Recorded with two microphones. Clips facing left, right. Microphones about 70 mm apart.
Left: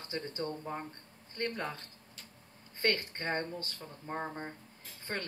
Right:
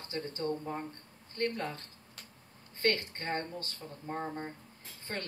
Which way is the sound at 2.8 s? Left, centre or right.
Left.